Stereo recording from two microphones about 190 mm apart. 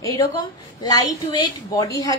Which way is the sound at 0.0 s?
20° left (ahead or behind).